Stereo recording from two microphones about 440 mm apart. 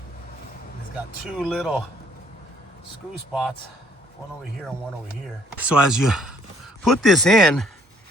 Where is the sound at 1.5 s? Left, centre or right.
Centre.